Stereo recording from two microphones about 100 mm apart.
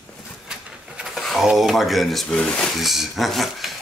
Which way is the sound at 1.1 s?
Centre (ahead or behind).